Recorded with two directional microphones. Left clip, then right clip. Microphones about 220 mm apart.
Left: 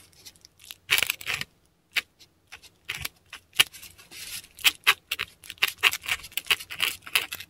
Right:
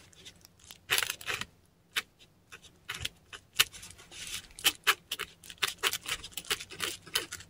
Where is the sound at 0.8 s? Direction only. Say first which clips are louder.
Left 6 dB; 15° left (ahead or behind).